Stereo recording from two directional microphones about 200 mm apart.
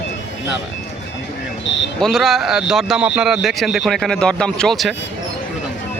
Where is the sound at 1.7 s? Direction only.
60° left (ahead or behind).